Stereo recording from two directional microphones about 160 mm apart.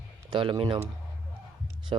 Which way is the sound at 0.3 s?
30° right (ahead or behind).